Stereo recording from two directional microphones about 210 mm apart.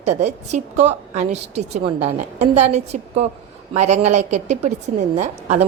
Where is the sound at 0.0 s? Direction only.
35° right (ahead or behind).